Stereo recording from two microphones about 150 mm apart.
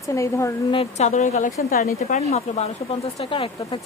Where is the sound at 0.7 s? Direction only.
50° left (ahead or behind).